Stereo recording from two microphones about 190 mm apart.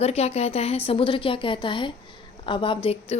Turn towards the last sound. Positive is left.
turn(degrees=30)  # may be behind; listen again after turning